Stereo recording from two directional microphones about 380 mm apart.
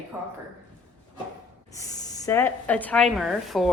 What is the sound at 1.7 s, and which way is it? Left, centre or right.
Speech, centre.